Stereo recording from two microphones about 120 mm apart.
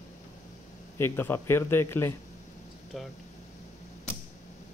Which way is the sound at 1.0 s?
20° left (ahead or behind).